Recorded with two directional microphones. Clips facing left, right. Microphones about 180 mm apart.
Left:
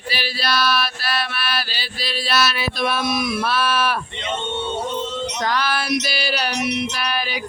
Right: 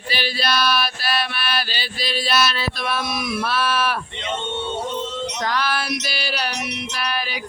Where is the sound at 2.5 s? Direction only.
20° left (ahead or behind).